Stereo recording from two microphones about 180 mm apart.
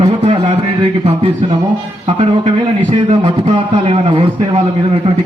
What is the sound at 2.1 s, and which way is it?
A man's voice, 35° right (ahead or behind).